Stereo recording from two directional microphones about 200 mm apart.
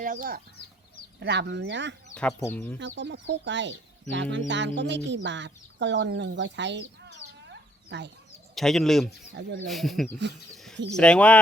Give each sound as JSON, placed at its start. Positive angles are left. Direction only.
{"t": 0.0, "sound": "speech", "side_deg": -45}
{"t": 1.2, "sound": "speech", "side_deg": -60}
{"t": 2.4, "sound": "speech", "side_deg": 10}
{"t": 2.7, "sound": "speech", "side_deg": -65}
{"t": 7.4, "sound": "chicken", "side_deg": -60}
{"t": 8.5, "sound": "speech", "side_deg": 0}
{"t": 10.5, "sound": "bird", "side_deg": 0}
{"t": 10.9, "sound": "speech", "side_deg": 5}